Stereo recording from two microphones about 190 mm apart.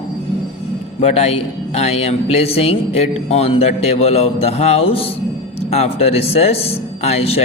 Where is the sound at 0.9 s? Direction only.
35° left (ahead or behind).